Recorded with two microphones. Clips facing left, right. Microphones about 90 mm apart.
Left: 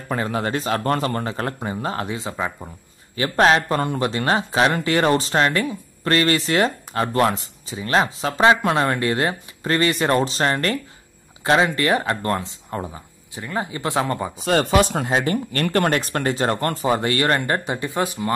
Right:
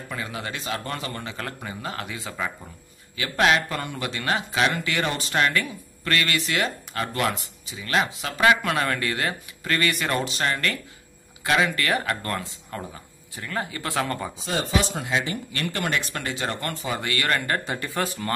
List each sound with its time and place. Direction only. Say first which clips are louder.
0.1 s speech: left 10 dB; 45° left (ahead or behind); by 14.3 s 20° left (ahead or behind)
14.4 s speech: left 9 dB; 65° left (ahead or behind); by 18.3 s 20° left (ahead or behind)